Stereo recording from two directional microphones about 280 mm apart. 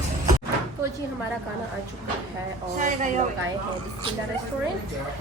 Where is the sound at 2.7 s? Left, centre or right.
Right.